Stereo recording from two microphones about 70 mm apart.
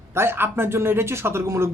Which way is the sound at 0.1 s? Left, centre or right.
Right.